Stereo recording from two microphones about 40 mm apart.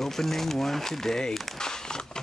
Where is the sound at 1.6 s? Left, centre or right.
Centre.